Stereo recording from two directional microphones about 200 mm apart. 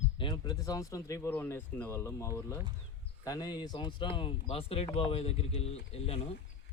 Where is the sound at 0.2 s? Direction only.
20° left (ahead or behind).